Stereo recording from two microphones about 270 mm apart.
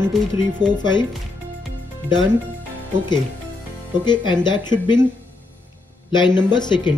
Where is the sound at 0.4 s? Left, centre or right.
Centre.